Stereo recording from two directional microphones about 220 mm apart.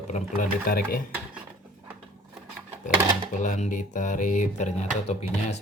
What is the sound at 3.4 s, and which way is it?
Speech, 30° left (ahead or behind).